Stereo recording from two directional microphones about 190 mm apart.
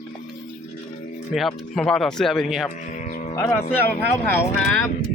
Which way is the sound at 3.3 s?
15° left (ahead or behind).